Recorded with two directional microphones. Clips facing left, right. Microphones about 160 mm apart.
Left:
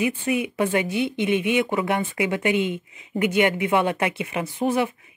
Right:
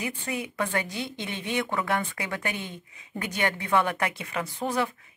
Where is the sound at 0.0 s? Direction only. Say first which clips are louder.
Left 9 dB; 20° left (ahead or behind).